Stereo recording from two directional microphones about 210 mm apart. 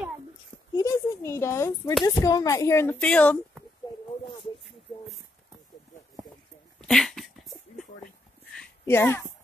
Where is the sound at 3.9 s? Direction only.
20° left (ahead or behind).